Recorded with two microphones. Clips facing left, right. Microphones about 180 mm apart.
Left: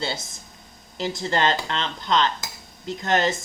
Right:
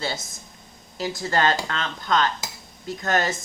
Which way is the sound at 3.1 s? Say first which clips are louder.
Left 2 dB; 25° left (ahead or behind).